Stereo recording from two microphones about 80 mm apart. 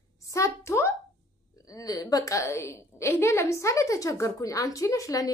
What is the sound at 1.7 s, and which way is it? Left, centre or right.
A woman's voice, left.